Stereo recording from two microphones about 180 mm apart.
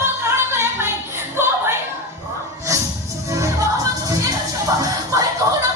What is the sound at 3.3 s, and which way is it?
Music, 15° right (ahead or behind).